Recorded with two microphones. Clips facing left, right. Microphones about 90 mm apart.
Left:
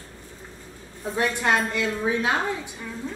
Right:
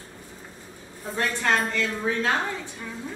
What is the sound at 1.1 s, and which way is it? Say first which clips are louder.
A woman's voice: left 2 dB; 15° left (ahead or behind).